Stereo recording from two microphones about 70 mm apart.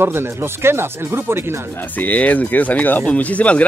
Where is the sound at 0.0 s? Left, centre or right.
Right.